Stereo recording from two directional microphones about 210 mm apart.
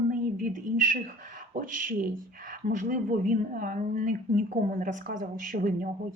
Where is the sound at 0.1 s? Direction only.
40° right (ahead or behind).